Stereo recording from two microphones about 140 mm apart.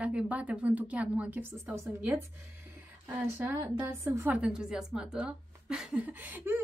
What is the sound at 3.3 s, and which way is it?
Speech, 15° right (ahead or behind).